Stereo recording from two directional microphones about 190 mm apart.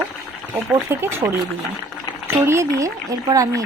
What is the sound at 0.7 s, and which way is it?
Speech, 10° right (ahead or behind).